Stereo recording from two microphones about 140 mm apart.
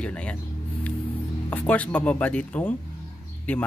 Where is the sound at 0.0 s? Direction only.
10° left (ahead or behind).